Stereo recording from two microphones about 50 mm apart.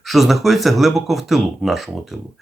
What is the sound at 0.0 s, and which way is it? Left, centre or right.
Speech, centre.